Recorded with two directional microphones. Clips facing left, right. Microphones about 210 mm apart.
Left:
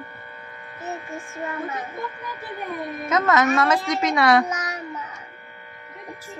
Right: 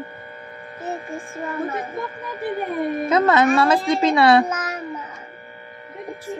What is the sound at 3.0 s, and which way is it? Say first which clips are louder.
Speech: right 3 dB; 30° right (ahead or behind).